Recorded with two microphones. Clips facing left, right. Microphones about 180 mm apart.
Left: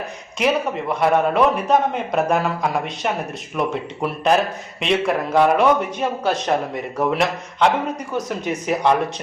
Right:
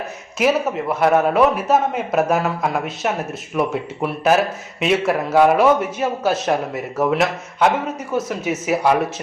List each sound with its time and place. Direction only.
0.3 s a man's voice: 5° right (ahead or behind)